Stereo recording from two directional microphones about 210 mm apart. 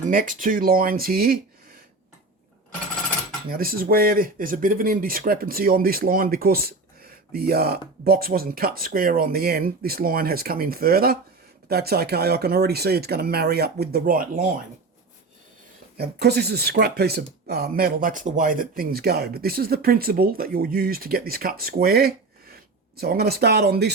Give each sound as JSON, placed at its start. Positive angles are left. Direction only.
{"t": 0.0, "sound": "speech", "side_deg": -40}
{"t": 3.5, "sound": "speech", "side_deg": -45}
{"t": 16.0, "sound": "speech", "side_deg": -50}